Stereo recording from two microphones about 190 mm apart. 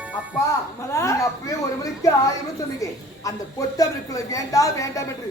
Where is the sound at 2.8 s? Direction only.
20° left (ahead or behind).